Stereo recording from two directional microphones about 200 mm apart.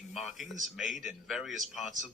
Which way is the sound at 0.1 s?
Centre (ahead or behind).